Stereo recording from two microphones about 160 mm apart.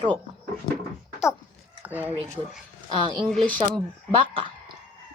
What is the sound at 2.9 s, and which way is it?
Speech, 30° right (ahead or behind).